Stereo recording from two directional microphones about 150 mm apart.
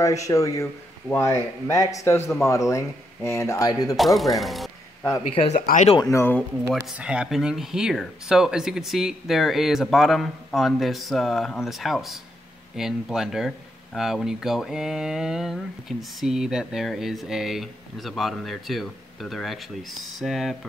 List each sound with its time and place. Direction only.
0.0 s speech: 20° left (ahead or behind)
3.9 s speech: centre (ahead or behind)
5.3 s speech: 40° left (ahead or behind)
5.9 s speech: 20° left (ahead or behind)
7.0 s speech: 5° right (ahead or behind)